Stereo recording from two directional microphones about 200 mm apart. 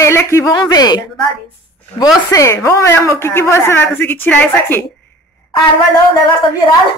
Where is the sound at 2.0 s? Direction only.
15° left (ahead or behind).